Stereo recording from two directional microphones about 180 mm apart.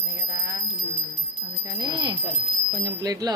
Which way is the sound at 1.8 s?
25° right (ahead or behind).